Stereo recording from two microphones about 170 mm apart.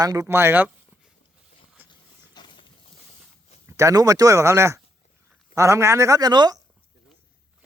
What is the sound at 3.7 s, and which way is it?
A man's voice, 15° right (ahead or behind).